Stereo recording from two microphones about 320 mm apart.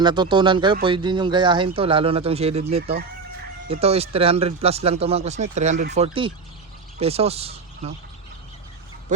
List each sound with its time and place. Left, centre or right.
0.0 s speech: centre